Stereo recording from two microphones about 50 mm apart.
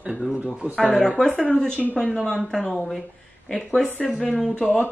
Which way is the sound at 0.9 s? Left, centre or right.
Centre.